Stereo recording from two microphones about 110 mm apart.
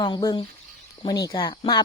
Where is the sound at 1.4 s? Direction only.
50° left (ahead or behind).